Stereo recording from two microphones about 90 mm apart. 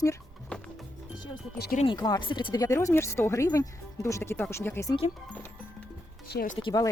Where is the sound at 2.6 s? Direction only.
35° left (ahead or behind).